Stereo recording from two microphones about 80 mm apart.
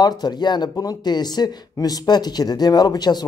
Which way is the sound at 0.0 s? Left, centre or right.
Left.